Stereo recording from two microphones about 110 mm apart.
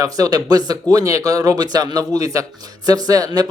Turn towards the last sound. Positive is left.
turn(degrees=-35)  # may be behind; listen again after turning